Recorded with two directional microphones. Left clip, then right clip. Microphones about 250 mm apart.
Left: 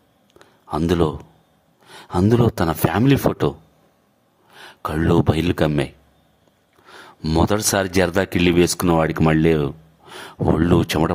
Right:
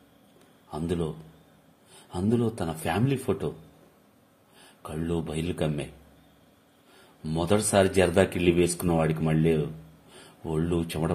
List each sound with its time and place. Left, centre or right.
0.7 s speech: left
4.8 s speech: left
6.9 s speech: left